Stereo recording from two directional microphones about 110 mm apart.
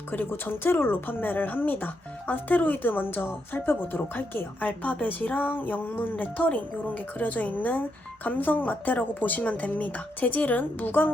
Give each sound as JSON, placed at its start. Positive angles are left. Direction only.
{"t": 0.1, "sound": "speech", "side_deg": 20}